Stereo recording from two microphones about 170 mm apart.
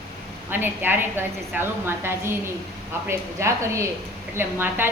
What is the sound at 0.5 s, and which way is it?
A woman's voice, 10° right (ahead or behind).